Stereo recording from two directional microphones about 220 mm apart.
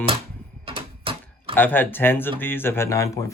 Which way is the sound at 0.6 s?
25° right (ahead or behind).